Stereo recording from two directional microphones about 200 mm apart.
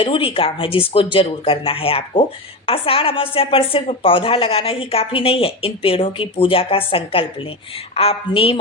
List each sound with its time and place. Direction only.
0.0 s a woman's voice: 25° left (ahead or behind)